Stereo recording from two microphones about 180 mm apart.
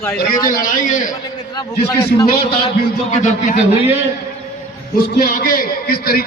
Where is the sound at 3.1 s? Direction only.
40° left (ahead or behind).